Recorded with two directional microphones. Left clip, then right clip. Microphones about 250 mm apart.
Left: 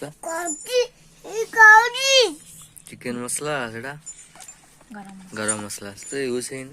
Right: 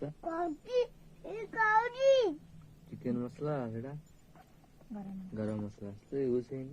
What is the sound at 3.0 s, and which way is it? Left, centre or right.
Speech, centre.